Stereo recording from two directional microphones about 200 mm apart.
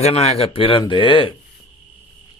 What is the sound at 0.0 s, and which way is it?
Speech, 30° left (ahead or behind).